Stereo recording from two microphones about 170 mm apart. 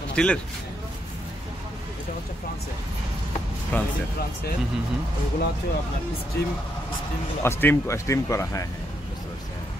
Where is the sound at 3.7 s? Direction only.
10° left (ahead or behind).